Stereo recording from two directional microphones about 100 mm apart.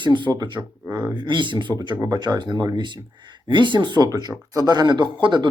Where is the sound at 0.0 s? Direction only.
50° right (ahead or behind).